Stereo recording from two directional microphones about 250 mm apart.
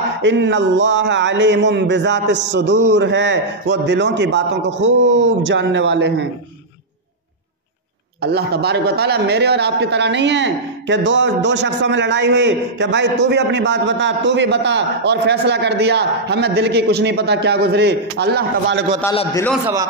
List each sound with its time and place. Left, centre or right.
0.2 s a man's voice: right
8.2 s a man's voice: right
19.6 s a man's voice: centre